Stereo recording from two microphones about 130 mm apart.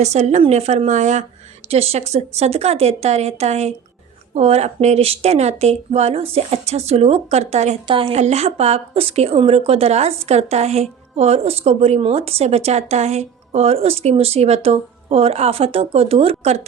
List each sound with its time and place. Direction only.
0.0 s speech: 60° right (ahead or behind)
1.7 s speech: 50° right (ahead or behind)
7.9 s a woman's voice: 45° right (ahead or behind)